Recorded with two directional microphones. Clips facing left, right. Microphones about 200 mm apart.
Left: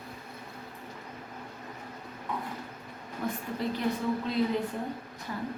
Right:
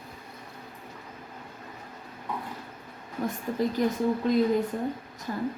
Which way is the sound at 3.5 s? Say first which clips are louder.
Right 6 dB; 45° right (ahead or behind).